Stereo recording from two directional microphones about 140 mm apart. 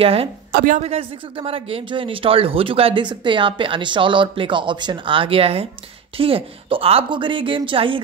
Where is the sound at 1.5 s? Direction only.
40° right (ahead or behind).